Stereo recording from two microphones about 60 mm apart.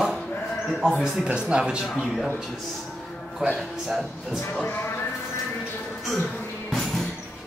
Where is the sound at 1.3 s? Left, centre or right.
Centre.